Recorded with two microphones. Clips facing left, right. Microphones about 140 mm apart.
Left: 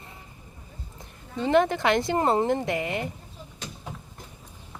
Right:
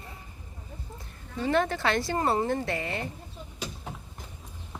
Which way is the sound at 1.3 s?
20° left (ahead or behind).